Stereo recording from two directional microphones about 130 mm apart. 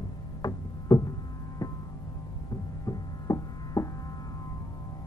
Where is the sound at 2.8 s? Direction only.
25° left (ahead or behind).